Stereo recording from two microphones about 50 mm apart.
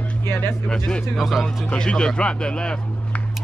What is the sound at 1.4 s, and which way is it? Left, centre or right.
Speech, centre.